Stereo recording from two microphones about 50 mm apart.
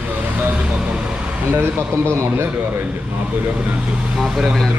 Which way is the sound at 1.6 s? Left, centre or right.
Right.